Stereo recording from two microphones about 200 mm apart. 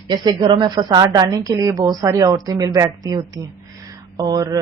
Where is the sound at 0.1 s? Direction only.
25° right (ahead or behind).